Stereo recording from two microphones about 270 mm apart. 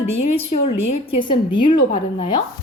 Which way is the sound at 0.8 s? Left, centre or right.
Left.